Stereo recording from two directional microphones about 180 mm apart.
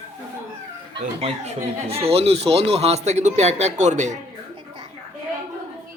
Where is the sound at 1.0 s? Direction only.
35° right (ahead or behind).